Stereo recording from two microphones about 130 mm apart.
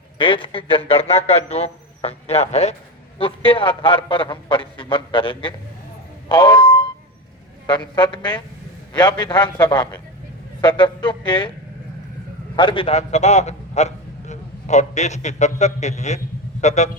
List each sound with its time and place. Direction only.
0.2 s a man's voice: 40° left (ahead or behind); by 2.7 s 55° left (ahead or behind)
3.2 s a man's voice: 45° left (ahead or behind)
6.2 s a sound: 35° left (ahead or behind)
7.7 s a man's voice: 35° left (ahead or behind)
12.5 s a man's voice: 40° left (ahead or behind)
12.9 s a man's voice: 55° left (ahead or behind)